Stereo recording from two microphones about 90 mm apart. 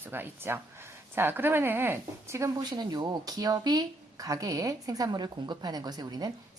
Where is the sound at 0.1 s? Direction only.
25° right (ahead or behind).